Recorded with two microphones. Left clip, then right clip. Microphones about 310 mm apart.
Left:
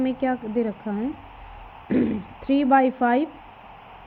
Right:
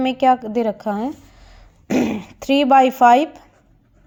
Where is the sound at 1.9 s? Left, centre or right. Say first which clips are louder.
Right 4 dB; centre.